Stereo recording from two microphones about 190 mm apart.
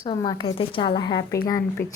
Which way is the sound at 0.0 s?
20° left (ahead or behind).